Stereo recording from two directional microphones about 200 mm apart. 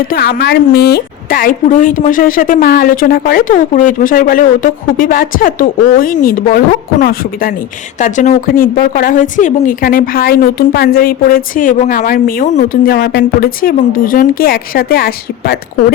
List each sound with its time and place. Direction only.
0.1 s speech: 50° left (ahead or behind)
7.9 s speech: 40° left (ahead or behind)